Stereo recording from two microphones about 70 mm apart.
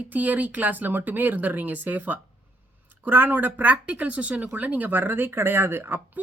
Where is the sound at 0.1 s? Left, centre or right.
Right.